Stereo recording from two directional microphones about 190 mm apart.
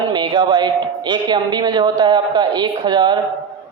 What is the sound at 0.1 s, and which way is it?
A man's voice, 25° right (ahead or behind).